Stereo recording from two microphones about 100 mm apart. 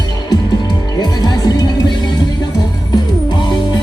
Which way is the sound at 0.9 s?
40° left (ahead or behind).